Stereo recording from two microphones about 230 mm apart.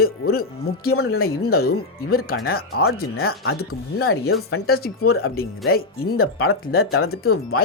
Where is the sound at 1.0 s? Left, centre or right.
Left.